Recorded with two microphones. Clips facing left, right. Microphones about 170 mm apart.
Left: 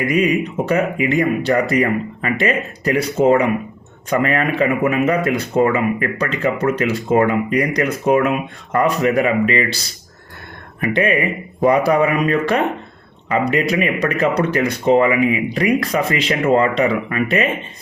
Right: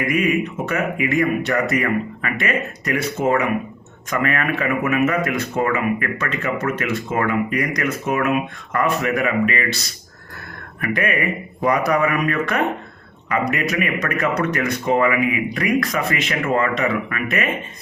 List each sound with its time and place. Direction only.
0.0 s a man's voice: 30° left (ahead or behind)